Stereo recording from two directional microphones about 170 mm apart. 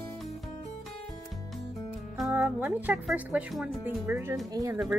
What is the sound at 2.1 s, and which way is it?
Speech, 5° right (ahead or behind).